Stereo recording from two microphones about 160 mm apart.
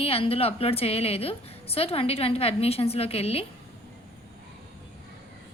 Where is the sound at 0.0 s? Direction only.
40° left (ahead or behind).